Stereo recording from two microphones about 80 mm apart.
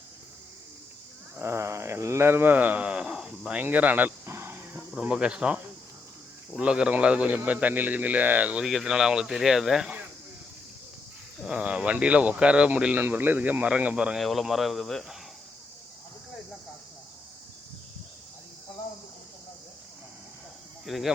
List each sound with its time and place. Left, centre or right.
1.4 s a sound: right; by 3.6 s centre
3.6 s a sound: centre
4.9 s speech: centre
6.6 s a man's voice: centre
8.6 s speech: centre
11.4 s a man's voice: centre
14.2 s speech: centre
20.8 s speech: centre